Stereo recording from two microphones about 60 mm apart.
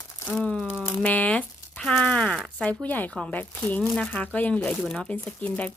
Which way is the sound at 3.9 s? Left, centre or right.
Centre.